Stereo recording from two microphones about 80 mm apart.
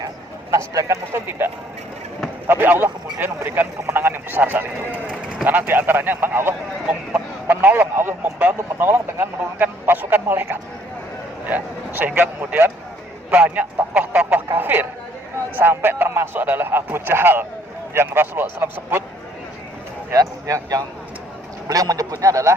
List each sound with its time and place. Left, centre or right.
0.5 s speech: right
2.5 s speech: right
20.1 s speech: right